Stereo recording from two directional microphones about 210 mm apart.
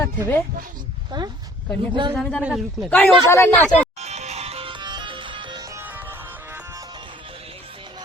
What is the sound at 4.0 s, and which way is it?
Music, 30° right (ahead or behind).